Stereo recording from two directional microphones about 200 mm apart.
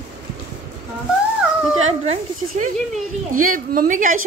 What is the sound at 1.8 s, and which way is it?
Speech, 35° right (ahead or behind).